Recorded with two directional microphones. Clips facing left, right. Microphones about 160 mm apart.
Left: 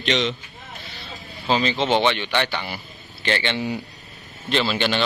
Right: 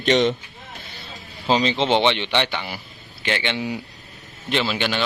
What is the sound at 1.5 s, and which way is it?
Speech, 25° right (ahead or behind).